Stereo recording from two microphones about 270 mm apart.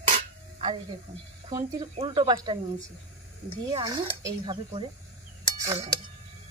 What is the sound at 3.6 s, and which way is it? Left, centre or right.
Speech, centre.